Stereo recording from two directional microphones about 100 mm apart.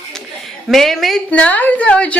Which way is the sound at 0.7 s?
Centre (ahead or behind).